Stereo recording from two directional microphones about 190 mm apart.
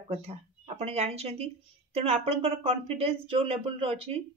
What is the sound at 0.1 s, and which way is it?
Speech, 35° right (ahead or behind).